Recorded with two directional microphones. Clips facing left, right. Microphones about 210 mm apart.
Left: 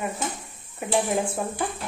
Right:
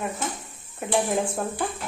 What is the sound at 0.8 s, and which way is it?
Speech, 5° left (ahead or behind).